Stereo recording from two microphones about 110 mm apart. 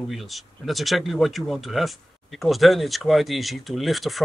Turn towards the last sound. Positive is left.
turn(degrees=0)  # may be behind; listen again after turning